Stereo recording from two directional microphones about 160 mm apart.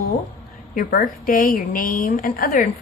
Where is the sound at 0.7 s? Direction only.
60° left (ahead or behind).